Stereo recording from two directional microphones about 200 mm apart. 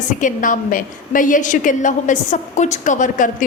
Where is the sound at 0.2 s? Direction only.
40° left (ahead or behind).